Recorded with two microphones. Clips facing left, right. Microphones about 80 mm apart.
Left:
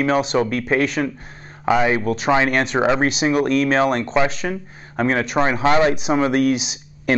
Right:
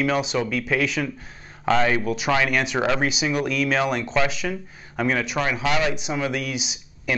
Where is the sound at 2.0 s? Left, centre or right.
Left.